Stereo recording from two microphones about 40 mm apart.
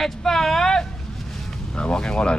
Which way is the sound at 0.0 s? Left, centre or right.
Centre.